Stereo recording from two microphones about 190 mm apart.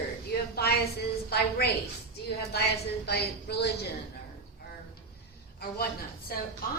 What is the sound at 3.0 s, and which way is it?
Speech, 60° left (ahead or behind).